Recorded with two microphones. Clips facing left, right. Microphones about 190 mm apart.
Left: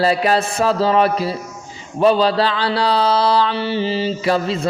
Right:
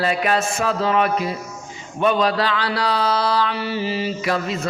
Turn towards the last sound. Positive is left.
turn(degrees=30)  # may be behind; listen again after turning